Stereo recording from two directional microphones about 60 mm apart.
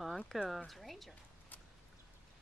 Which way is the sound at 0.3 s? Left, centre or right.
Centre.